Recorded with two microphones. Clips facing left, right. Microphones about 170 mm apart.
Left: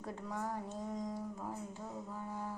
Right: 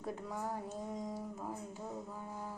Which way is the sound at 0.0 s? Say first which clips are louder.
Right 1 dB; 10° right (ahead or behind).